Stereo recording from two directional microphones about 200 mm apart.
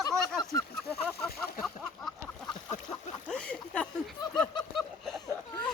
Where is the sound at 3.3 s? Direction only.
5° left (ahead or behind).